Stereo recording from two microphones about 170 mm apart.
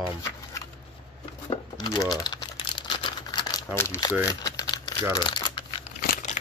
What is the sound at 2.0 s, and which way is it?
Typing, 20° left (ahead or behind).